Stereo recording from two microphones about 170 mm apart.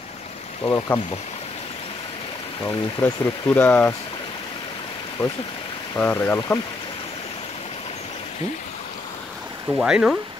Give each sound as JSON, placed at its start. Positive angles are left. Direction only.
{"t": 0.7, "sound": "speech", "side_deg": 20}
{"t": 2.6, "sound": "speech", "side_deg": 10}
{"t": 5.2, "sound": "speech", "side_deg": 15}
{"t": 9.7, "sound": "speech", "side_deg": -5}